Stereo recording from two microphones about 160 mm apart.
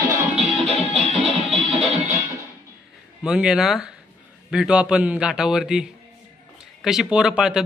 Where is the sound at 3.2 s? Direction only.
5° right (ahead or behind).